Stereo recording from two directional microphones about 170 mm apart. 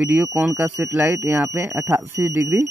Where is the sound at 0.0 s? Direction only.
10° right (ahead or behind).